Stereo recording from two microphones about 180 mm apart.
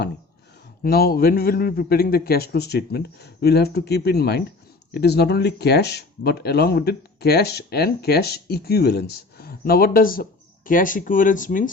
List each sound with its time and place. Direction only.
0.8 s speech: 60° left (ahead or behind)